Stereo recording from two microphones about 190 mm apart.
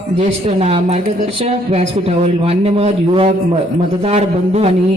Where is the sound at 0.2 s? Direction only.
35° right (ahead or behind).